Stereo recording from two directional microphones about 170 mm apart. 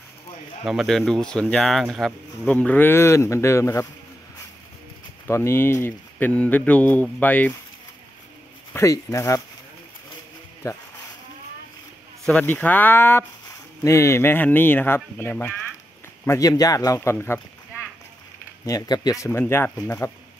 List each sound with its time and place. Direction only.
0.7 s speech: centre (ahead or behind); by 3.8 s 15° left (ahead or behind)
5.2 s speech: 15° left (ahead or behind)
8.7 s speech: 20° left (ahead or behind)
12.3 s speech: 10° left (ahead or behind)
18.7 s speech: 20° left (ahead or behind)